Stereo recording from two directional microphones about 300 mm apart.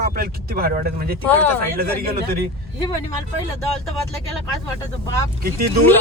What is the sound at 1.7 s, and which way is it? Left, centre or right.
Speech, right.